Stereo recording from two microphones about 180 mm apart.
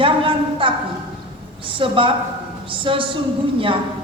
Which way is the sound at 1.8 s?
30° right (ahead or behind).